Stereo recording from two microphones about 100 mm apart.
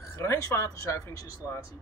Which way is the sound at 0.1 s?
30° left (ahead or behind).